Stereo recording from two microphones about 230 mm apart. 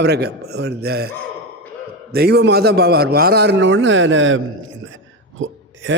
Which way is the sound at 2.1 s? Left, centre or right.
Right.